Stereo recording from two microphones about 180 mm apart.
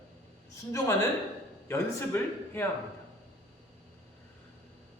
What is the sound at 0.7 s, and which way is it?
A man's voice, 15° left (ahead or behind).